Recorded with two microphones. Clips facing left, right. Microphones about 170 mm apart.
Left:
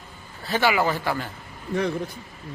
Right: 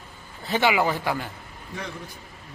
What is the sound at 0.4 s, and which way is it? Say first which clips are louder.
Speech: even; 20° right (ahead or behind).